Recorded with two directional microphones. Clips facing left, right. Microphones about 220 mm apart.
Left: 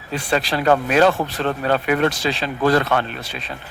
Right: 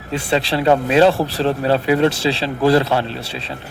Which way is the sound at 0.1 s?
25° right (ahead or behind).